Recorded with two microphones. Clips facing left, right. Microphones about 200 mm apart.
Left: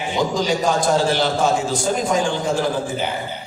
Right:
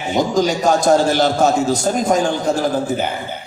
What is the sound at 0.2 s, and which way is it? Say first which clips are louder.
A man's voice: right 3 dB; 45° right (ahead or behind).